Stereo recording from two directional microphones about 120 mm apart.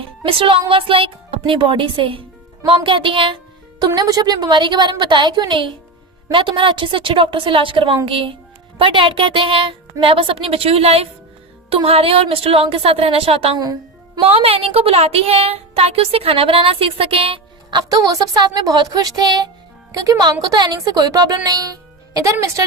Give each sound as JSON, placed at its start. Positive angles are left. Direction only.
{"t": 0.3, "sound": "a woman's voice", "side_deg": -50}
{"t": 17.7, "sound": "a woman's voice", "side_deg": -35}